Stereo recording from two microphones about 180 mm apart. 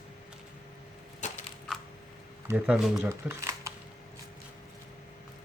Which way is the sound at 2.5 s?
5° right (ahead or behind).